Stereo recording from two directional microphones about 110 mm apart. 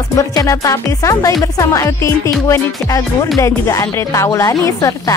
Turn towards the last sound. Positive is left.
turn(degrees=30)  # may be behind; listen again after turning